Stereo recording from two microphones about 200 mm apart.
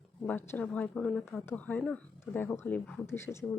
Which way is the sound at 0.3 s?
10° left (ahead or behind).